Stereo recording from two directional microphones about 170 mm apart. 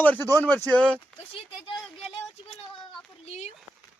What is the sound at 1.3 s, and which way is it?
Speech, 30° left (ahead or behind).